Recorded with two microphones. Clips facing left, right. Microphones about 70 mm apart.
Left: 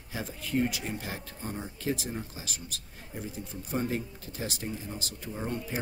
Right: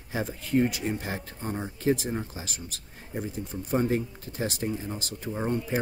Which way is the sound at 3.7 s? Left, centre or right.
Right.